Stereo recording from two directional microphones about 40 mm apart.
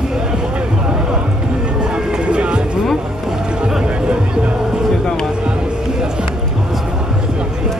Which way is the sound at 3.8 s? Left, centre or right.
Right.